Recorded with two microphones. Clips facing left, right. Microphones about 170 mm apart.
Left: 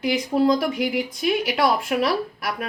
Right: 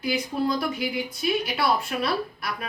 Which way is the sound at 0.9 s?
75° left (ahead or behind).